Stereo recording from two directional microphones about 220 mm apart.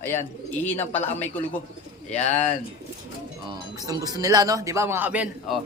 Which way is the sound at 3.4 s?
15° right (ahead or behind).